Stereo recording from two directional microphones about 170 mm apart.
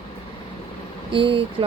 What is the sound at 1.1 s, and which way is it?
Speech, 30° right (ahead or behind).